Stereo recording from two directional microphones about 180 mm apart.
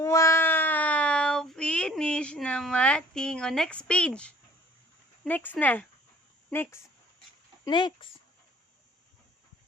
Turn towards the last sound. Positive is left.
turn(degrees=25)  # may be behind; listen again after turning